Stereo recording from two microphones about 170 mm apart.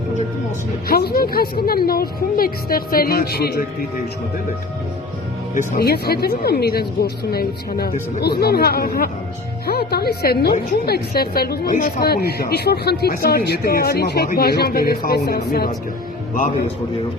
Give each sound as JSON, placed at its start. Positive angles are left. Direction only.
{"t": 0.9, "sound": "speech", "side_deg": 65}
{"t": 5.5, "sound": "speech", "side_deg": 60}